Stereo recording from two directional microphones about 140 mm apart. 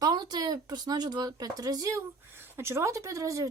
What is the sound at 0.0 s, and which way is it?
Speech, 30° right (ahead or behind).